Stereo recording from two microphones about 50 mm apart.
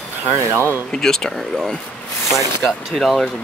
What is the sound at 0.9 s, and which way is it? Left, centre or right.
Speech, centre.